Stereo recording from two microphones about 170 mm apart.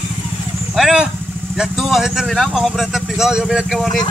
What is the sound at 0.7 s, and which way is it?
Speech, 5° right (ahead or behind).